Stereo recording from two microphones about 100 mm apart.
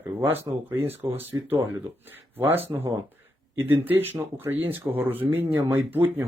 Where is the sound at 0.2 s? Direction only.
25° right (ahead or behind).